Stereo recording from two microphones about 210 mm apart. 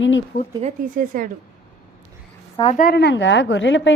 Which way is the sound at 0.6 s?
40° right (ahead or behind).